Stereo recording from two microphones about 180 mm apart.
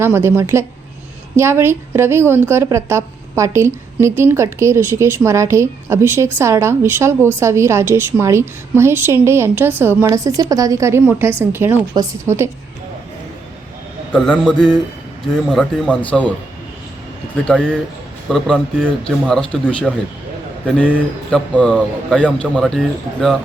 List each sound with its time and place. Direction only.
0.0 s a woman's voice: 15° right (ahead or behind)
14.1 s a man's voice: 5° left (ahead or behind)
17.4 s a man's voice: 5° left (ahead or behind)
20.7 s speech: 5° left (ahead or behind)